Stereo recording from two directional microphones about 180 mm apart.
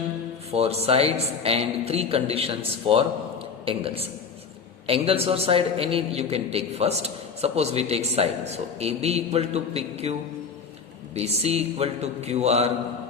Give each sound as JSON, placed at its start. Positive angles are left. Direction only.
{"t": 0.5, "sound": "a man's voice", "side_deg": -35}